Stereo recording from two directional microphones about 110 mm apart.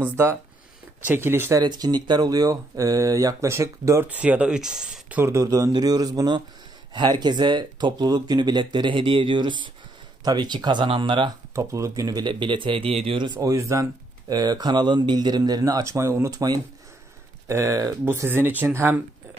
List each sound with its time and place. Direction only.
1.0 s speech: 20° right (ahead or behind)
1.6 s speech: 40° right (ahead or behind)
4.1 s speech: 10° right (ahead or behind)
5.2 s speech: 30° right (ahead or behind); by 11.3 s 45° right (ahead or behind)
11.5 s speech: 30° right (ahead or behind); by 13.2 s 60° right (ahead or behind)
13.2 s speech: 35° right (ahead or behind)
14.3 s speech: 40° right (ahead or behind); by 18.9 s 20° right (ahead or behind)